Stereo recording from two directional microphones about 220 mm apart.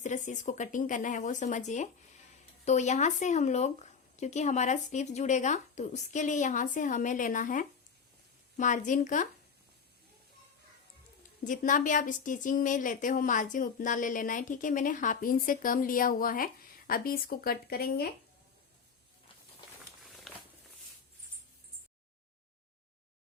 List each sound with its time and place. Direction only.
0.0 s speech: 35° left (ahead or behind)
11.4 s speech: 35° left (ahead or behind)
20.1 s a sound: centre (ahead or behind)